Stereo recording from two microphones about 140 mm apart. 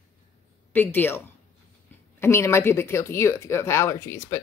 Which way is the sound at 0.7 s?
15° left (ahead or behind).